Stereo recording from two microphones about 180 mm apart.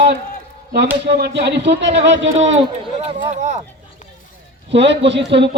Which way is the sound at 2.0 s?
90° right.